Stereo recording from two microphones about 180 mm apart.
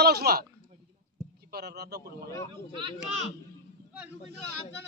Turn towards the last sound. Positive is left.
turn(degrees=-35)  # may be behind; listen again after turning